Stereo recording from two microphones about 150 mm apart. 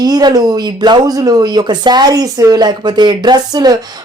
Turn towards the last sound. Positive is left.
turn(degrees=-25)  # may be behind; listen again after turning